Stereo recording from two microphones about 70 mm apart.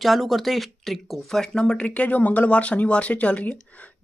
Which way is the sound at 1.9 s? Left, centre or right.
Left.